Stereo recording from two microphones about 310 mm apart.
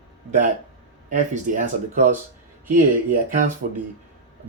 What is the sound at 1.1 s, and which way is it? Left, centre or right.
Speech, right.